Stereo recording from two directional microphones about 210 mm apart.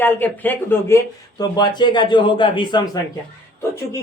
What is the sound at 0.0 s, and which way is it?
Speech, 10° left (ahead or behind).